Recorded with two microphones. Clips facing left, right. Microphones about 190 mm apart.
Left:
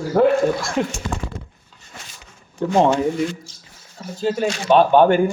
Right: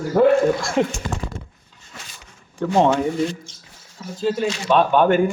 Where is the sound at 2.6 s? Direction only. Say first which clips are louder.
Left 1 dB; 10° left (ahead or behind).